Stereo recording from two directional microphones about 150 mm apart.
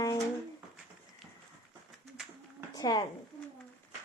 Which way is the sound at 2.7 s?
30° left (ahead or behind).